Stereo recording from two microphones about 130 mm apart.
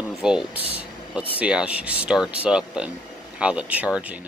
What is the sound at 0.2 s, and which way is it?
Speech, 5° right (ahead or behind).